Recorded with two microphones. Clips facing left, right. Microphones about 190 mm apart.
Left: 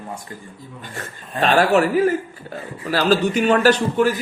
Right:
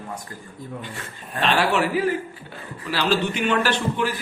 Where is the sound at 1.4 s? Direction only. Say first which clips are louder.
Left 5 dB; 45° left (ahead or behind).